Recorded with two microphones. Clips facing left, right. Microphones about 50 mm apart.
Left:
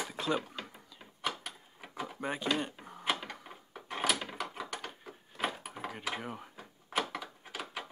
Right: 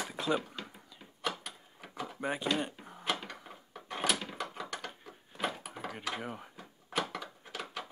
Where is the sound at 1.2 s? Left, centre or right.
Centre.